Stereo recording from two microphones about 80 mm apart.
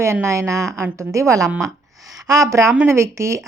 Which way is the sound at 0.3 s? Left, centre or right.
Right.